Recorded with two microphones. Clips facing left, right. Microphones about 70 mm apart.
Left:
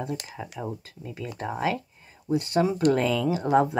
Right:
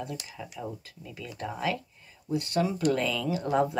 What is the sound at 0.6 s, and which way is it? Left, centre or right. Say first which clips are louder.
Speech: left 3 dB; left.